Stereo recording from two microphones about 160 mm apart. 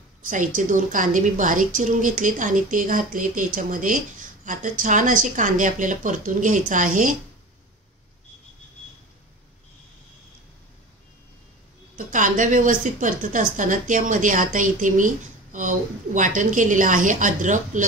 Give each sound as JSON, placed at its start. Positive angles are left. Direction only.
{"t": 0.2, "sound": "a woman's voice", "side_deg": -55}
{"t": 12.1, "sound": "a woman's voice", "side_deg": -55}